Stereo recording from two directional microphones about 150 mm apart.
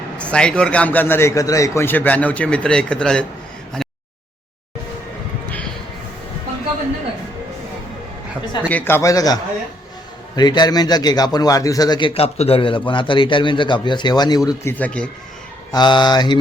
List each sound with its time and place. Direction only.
0.2 s a man's voice: 5° left (ahead or behind)
3.8 s a sound: 5° left (ahead or behind)
8.7 s a man's voice: 15° left (ahead or behind)
15.7 s a man's voice: 30° left (ahead or behind)